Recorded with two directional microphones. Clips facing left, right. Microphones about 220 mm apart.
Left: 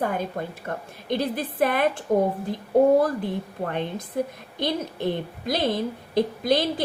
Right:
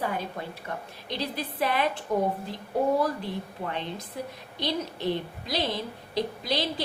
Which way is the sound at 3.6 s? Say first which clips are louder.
Left 5 dB; 50° left (ahead or behind).